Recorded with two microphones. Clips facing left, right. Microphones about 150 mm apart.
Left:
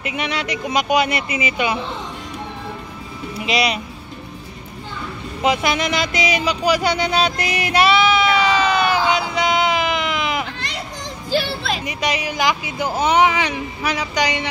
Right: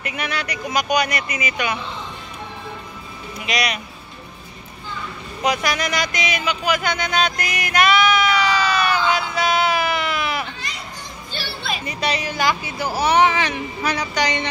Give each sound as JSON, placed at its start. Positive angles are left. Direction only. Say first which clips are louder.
{"t": 0.0, "sound": "speech", "louder": "left 3 dB", "side_deg": 20}
{"t": 3.3, "sound": "speech", "louder": "left 4 dB", "side_deg": 25}
{"t": 5.4, "sound": "music", "louder": "left 3 dB", "side_deg": 25}
{"t": 9.1, "sound": "a sound", "louder": "left 1 dB", "side_deg": 20}
{"t": 11.2, "sound": "music", "louder": "left 10 dB", "side_deg": 90}
{"t": 11.8, "sound": "speech", "louder": "left 1 dB", "side_deg": 15}